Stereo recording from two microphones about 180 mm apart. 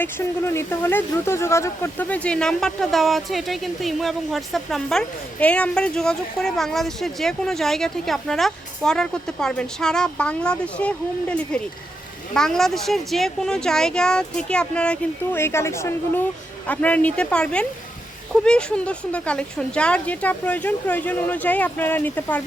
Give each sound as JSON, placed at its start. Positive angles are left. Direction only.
{"t": 0.0, "sound": "speech", "side_deg": 15}